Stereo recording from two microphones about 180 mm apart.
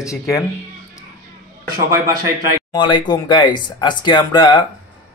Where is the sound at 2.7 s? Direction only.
25° left (ahead or behind).